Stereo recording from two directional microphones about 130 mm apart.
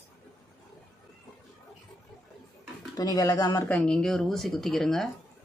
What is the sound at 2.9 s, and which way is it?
Speech, 30° left (ahead or behind).